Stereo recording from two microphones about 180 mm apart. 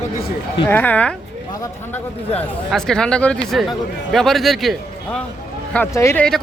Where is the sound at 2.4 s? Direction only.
5° left (ahead or behind).